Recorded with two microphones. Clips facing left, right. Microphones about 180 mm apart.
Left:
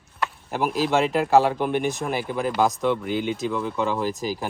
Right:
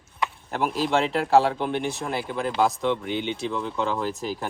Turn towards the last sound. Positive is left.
turn(degrees=10)  # may be behind; listen again after turning